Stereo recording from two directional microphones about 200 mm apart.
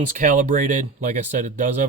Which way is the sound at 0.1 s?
40° right (ahead or behind).